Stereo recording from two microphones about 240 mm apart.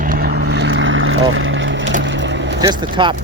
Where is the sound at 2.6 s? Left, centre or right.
Centre.